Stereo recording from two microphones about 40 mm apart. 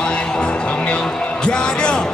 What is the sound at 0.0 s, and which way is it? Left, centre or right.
Music, left.